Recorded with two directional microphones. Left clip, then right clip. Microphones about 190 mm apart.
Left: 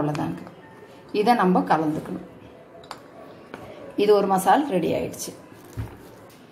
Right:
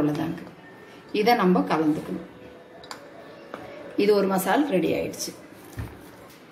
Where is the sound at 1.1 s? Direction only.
30° left (ahead or behind).